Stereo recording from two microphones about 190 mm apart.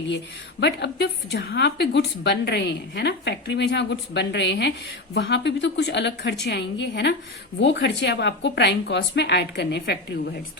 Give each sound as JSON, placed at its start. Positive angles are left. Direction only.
{"t": 0.6, "sound": "a woman's voice", "side_deg": 65}